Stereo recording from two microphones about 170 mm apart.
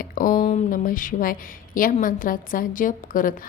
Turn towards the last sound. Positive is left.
turn(degrees=55)  # may be behind; listen again after turning